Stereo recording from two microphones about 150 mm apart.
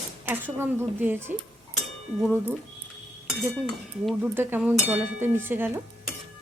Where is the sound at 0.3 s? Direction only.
15° right (ahead or behind).